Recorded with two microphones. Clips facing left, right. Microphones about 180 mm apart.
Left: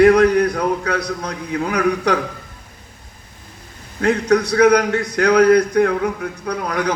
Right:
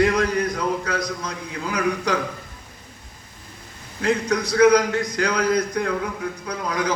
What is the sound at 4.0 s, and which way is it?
A man's voice, 65° left (ahead or behind).